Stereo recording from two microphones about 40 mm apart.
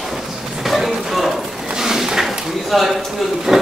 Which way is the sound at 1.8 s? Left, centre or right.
Centre.